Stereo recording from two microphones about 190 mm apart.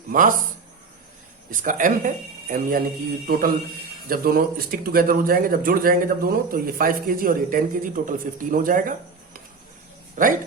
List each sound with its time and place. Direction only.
0.1 s speech: 45° right (ahead or behind)
1.5 s speech: 45° right (ahead or behind)
10.2 s speech: 45° right (ahead or behind)